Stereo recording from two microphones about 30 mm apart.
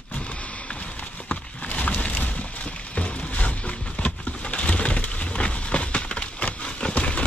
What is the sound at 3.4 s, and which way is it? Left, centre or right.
Pigeon, left.